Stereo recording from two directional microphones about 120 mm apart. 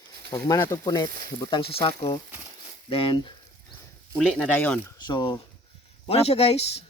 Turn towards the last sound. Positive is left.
turn(degrees=55)  # may be behind; listen again after turning